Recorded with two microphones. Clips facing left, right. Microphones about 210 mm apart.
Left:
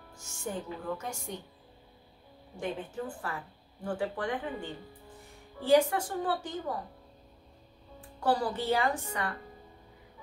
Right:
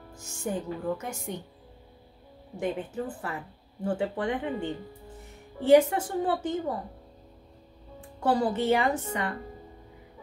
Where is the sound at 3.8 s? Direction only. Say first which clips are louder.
Right 4 dB; 25° right (ahead or behind).